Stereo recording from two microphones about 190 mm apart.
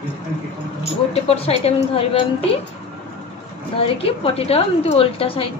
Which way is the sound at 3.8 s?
30° left (ahead or behind).